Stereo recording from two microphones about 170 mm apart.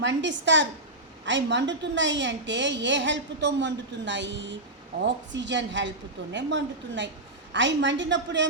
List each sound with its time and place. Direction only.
0.0 s a woman's voice: 90° right